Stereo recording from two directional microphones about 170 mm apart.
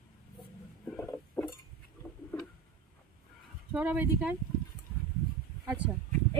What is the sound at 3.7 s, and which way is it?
Speech, 10° right (ahead or behind).